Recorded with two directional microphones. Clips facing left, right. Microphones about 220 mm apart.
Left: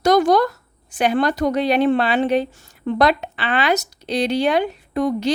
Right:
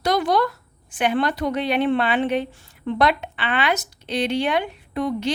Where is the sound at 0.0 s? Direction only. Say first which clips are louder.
Left 5 dB; 45° left (ahead or behind).